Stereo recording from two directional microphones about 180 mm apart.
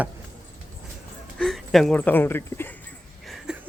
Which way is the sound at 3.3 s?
5° right (ahead or behind).